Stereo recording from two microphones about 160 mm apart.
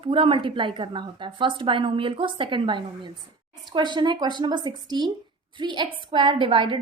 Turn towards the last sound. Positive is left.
turn(degrees=-30)  # may be behind; listen again after turning